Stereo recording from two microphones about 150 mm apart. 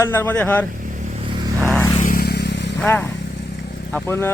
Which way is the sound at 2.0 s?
75° left (ahead or behind).